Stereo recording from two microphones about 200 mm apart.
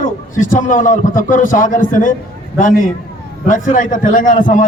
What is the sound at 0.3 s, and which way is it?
A man's voice, 40° left (ahead or behind).